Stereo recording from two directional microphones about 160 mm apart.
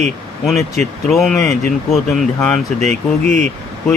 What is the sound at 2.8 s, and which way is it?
Speech, 45° right (ahead or behind).